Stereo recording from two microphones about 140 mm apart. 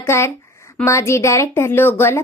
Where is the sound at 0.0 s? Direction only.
20° left (ahead or behind).